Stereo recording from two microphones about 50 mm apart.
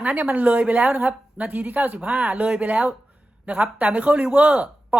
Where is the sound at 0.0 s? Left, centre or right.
Right.